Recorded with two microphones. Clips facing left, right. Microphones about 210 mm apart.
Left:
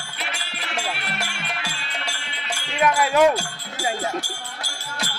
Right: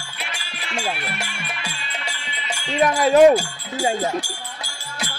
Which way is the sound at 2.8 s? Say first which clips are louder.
Right 4 dB; 35° right (ahead or behind).